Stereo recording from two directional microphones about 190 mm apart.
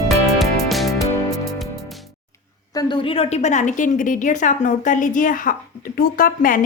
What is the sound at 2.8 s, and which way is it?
A woman's voice, 25° left (ahead or behind).